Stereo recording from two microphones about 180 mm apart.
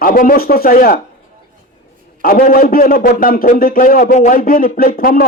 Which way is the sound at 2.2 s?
50° left (ahead or behind).